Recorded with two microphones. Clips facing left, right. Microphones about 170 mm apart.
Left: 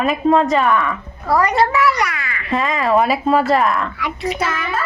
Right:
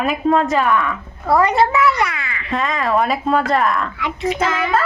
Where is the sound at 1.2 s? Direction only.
25° right (ahead or behind).